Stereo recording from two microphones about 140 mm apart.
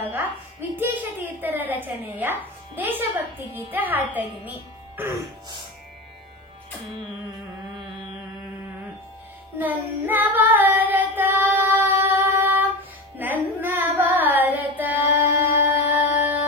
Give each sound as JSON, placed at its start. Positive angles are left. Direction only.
{"t": 0.1, "sound": "a woman's voice", "side_deg": -15}
{"t": 9.6, "sound": "female singing", "side_deg": -15}
{"t": 13.2, "sound": "carnatic music", "side_deg": -15}